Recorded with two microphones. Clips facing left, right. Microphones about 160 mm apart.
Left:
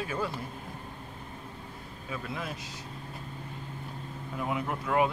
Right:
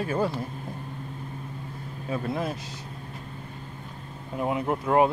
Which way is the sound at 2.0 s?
40° right (ahead or behind).